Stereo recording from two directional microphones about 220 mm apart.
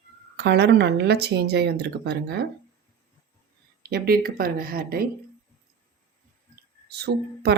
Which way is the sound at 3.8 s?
45° right (ahead or behind).